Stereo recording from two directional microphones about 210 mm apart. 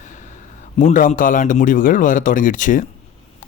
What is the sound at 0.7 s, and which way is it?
Speech, 40° left (ahead or behind).